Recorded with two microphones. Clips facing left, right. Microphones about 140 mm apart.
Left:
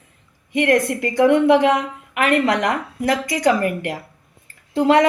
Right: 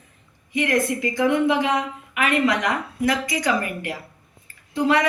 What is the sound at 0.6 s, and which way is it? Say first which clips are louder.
A woman's voice: left 4 dB; 65° left (ahead or behind).